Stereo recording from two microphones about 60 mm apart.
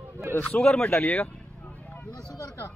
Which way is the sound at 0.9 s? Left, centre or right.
Left.